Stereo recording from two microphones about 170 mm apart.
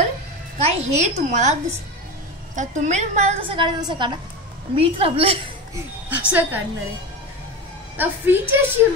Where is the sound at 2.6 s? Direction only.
45° right (ahead or behind).